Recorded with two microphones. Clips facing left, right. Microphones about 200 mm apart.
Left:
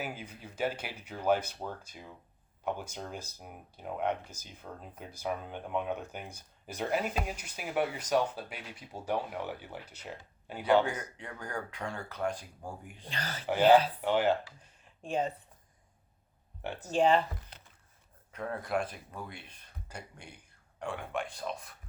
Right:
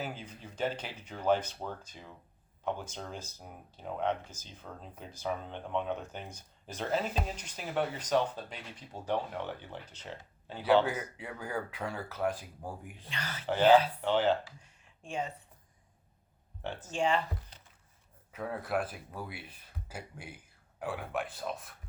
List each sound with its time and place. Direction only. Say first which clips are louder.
0.0 s speech: even; 10° left (ahead or behind)
10.8 s speech: right 1 dB; 5° right (ahead or behind)
13.1 s speech: left 2 dB; 35° left (ahead or behind)
13.7 s speech: even; 10° left (ahead or behind)
14.6 s a sound: left 6 dB; 35° left (ahead or behind)
16.6 s speech: left 1 dB; 10° left (ahead or behind)
16.9 s speech: left 5 dB; 35° left (ahead or behind)
18.3 s speech: even; 5° right (ahead or behind)